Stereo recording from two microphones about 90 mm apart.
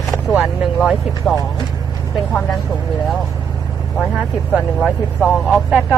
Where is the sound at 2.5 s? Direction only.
5° left (ahead or behind).